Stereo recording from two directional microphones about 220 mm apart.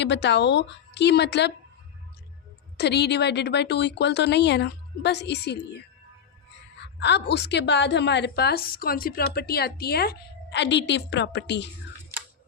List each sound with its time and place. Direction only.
0.0 s a woman's voice: 50° left (ahead or behind)
2.7 s a woman's voice: 50° left (ahead or behind)
7.0 s a woman's voice: 50° left (ahead or behind)